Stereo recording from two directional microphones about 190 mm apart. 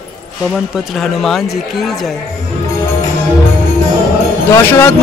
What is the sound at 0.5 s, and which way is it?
Speech, centre (ahead or behind).